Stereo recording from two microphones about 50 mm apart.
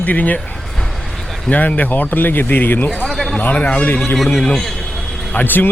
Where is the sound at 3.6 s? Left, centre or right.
Left.